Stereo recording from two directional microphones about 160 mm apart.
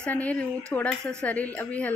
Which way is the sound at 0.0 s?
10° left (ahead or behind).